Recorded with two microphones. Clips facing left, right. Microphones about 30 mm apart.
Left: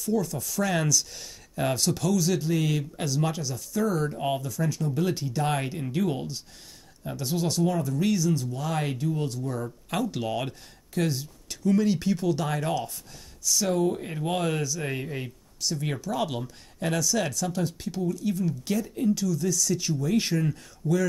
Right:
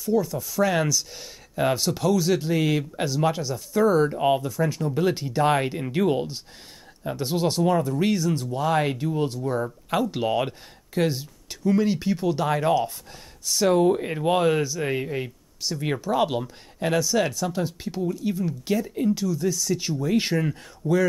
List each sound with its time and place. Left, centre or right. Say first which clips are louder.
0.0 s speech: right 4 dB; centre; by 9.8 s right
9.8 s speech: right 4 dB; centre
13.4 s speech: right 5 dB; right